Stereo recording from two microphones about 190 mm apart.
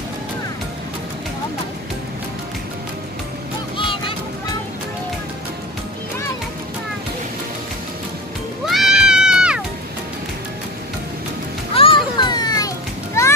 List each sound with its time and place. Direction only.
3.7 s music: 25° left (ahead or behind)
8.6 s a sound: centre (ahead or behind)
11.7 s children playing: 30° left (ahead or behind)